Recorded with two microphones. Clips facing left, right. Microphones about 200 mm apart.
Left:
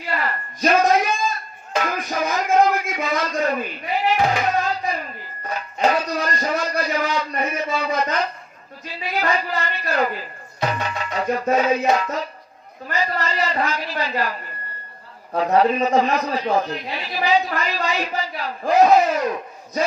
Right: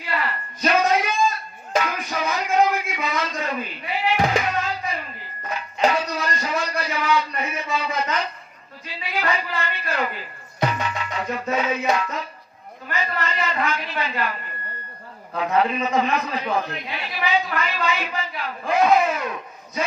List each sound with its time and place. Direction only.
0.0 s a sound: 45° left (ahead or behind)
1.8 s music: 45° left (ahead or behind)
9.0 s a man's voice: 45° left (ahead or behind)
10.7 s music: 40° left (ahead or behind)
12.9 s a man's voice: 35° left (ahead or behind)